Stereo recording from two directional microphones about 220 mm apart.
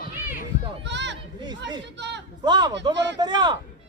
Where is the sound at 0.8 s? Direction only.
50° right (ahead or behind).